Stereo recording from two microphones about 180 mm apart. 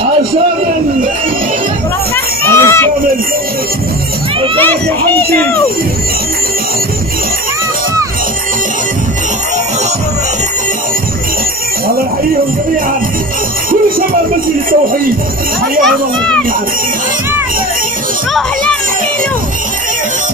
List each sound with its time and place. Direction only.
2.4 s a sound: 15° left (ahead or behind)
13.7 s music: 50° right (ahead or behind)
15.8 s children playing: 5° left (ahead or behind)
18.3 s children playing: 5° left (ahead or behind)